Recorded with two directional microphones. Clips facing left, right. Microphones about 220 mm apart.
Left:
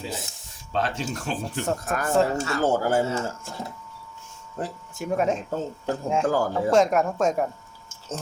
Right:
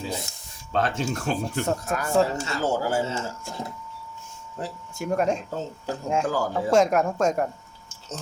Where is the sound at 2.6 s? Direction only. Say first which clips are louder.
Left 2 dB; 55° left (ahead or behind).